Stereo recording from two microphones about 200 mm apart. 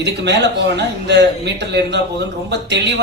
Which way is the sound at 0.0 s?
60° right (ahead or behind).